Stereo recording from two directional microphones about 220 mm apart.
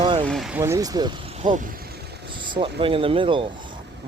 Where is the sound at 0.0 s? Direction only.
20° right (ahead or behind).